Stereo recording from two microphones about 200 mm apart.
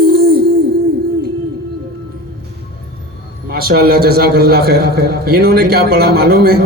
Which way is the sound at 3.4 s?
50° right (ahead or behind).